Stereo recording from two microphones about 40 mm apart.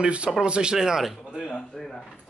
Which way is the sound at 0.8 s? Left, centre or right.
Centre.